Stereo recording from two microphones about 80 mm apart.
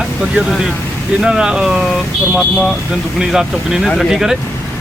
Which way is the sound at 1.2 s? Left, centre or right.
Centre.